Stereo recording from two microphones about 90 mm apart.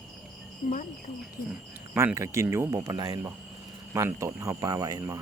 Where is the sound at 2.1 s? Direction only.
35° right (ahead or behind).